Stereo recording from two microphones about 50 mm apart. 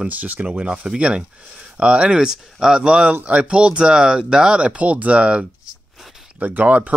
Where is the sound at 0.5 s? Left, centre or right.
Right.